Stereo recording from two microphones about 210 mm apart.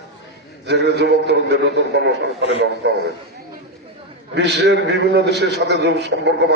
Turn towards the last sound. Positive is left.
turn(degrees=-55)  # may be behind; listen again after turning